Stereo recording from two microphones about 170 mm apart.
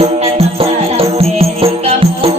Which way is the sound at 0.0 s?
35° right (ahead or behind).